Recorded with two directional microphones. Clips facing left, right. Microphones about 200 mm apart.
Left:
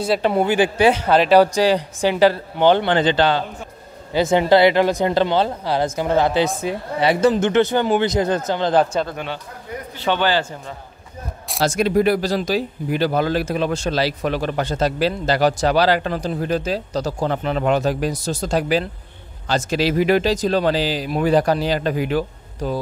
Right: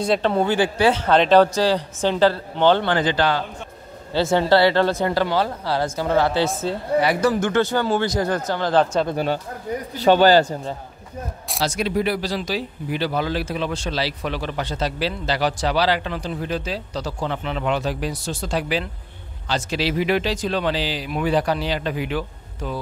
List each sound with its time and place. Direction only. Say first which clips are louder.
0.0 s speech: left 1 dB; 10° left (ahead or behind)
9.1 s a man's voice: right 6 dB; 40° right (ahead or behind)
11.6 s speech: left 5 dB; 50° left (ahead or behind)